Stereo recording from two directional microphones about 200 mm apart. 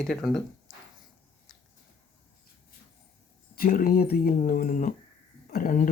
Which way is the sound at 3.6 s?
45° left (ahead or behind).